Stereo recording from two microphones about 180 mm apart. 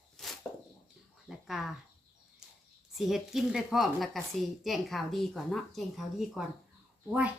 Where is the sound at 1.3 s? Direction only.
Centre (ahead or behind).